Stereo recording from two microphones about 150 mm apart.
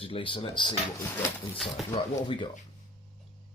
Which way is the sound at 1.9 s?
30° left (ahead or behind).